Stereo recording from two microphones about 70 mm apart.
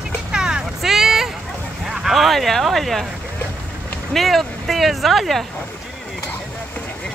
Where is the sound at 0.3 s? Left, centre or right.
Centre.